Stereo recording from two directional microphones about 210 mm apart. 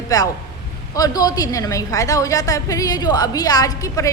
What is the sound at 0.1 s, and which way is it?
A woman's voice, 15° left (ahead or behind).